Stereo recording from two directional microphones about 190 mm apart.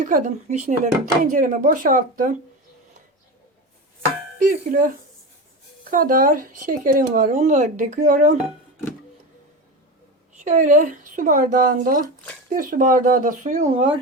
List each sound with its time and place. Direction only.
0.0 s speech: 45° right (ahead or behind)
4.0 s speech: 45° right (ahead or behind)
5.9 s speech: 45° right (ahead or behind)
10.3 s speech: 40° right (ahead or behind)